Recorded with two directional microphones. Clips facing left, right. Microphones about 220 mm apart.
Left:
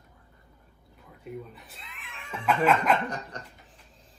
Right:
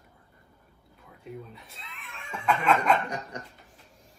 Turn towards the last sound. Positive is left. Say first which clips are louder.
# right 1 dB
turn(degrees=-10)  # may be behind; listen again after turning